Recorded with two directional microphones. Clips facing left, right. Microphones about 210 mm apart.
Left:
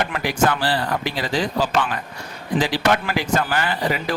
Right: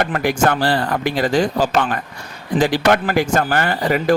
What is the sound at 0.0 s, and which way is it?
Speech, 50° right (ahead or behind).